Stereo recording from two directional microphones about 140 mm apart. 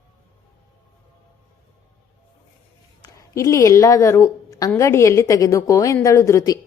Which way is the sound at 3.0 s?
20° left (ahead or behind).